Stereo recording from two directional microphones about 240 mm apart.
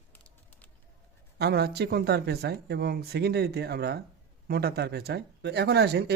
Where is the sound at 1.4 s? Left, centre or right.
Right.